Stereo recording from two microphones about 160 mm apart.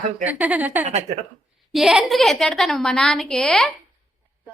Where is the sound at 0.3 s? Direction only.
10° right (ahead or behind).